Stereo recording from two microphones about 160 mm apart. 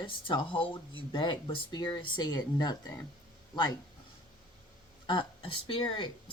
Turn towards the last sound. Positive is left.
turn(degrees=30)  # may be behind; listen again after turning